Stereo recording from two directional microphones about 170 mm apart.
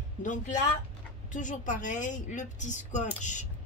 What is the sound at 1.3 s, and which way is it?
A woman's voice, 50° left (ahead or behind).